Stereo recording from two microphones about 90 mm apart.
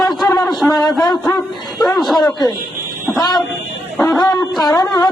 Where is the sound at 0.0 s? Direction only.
Centre (ahead or behind).